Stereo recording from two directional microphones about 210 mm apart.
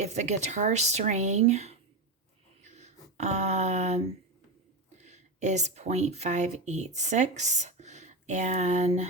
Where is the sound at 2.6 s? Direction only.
35° right (ahead or behind).